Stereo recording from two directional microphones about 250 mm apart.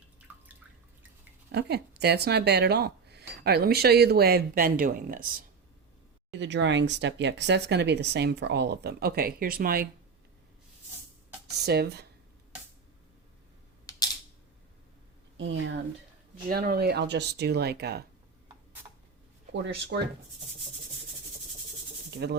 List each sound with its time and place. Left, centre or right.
0.3 s drip: centre
1.5 s speech: right
6.4 s speech: right
11.5 s speech: right
13.9 s typing: centre
15.4 s speech: right
19.6 s speech: right
22.1 s speech: right